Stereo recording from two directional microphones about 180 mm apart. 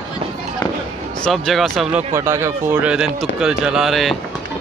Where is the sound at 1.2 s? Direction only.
Centre (ahead or behind).